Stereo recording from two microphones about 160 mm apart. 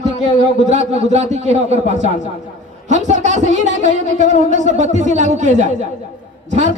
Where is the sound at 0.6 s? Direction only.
45° right (ahead or behind).